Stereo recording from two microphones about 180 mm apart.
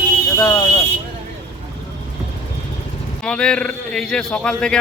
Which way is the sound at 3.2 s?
5° left (ahead or behind).